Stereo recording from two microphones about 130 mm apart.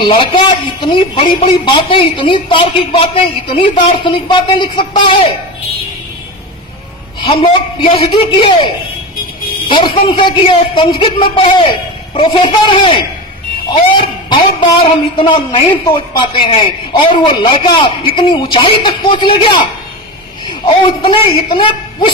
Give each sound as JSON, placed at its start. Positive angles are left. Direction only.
{"t": 0.0, "sound": "a man's voice", "side_deg": 45}
{"t": 7.2, "sound": "a man's voice", "side_deg": 45}
{"t": 20.7, "sound": "a man's voice", "side_deg": 40}